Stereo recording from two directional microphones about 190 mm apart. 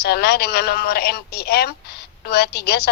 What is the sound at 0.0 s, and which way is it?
Speech, 55° left (ahead or behind).